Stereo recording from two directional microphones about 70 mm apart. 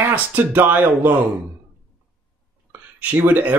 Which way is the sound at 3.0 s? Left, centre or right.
Right.